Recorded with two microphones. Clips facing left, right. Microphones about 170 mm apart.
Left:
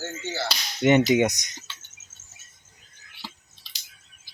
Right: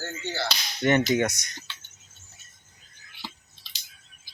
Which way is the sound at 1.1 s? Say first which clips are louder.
Left 4 dB; 15° left (ahead or behind).